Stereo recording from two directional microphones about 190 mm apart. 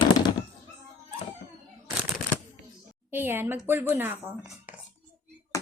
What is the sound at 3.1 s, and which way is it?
Speech, 10° right (ahead or behind).